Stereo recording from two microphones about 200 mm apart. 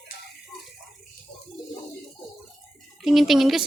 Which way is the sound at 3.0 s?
Centre (ahead or behind).